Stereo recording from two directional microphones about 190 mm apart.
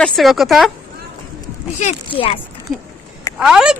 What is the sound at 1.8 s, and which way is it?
Speech, 35° left (ahead or behind).